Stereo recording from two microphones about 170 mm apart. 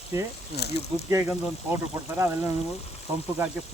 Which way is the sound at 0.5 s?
75° left (ahead or behind).